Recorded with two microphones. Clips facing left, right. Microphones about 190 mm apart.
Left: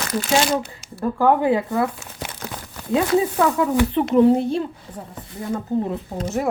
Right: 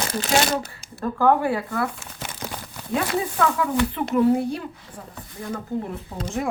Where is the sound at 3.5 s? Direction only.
20° left (ahead or behind).